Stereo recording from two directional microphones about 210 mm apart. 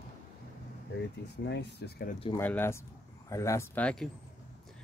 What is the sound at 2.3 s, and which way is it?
Speech, 10° left (ahead or behind).